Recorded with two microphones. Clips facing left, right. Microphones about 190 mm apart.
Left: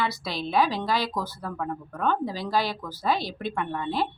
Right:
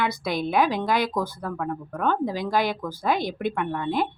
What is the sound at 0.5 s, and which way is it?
Speech, 15° right (ahead or behind).